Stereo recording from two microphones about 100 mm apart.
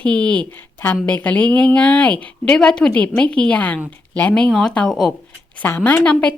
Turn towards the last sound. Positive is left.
turn(degrees=10)  # may be behind; listen again after turning